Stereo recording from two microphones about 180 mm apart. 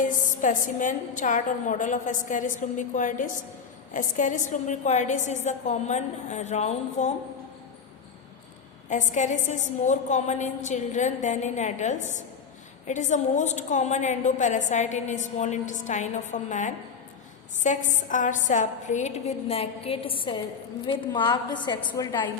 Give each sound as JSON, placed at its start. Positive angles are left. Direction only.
{"t": 0.0, "sound": "a woman's voice", "side_deg": 45}
{"t": 8.9, "sound": "a woman's voice", "side_deg": 45}